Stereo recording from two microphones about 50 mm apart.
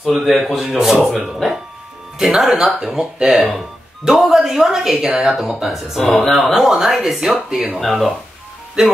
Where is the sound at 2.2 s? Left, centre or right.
Centre.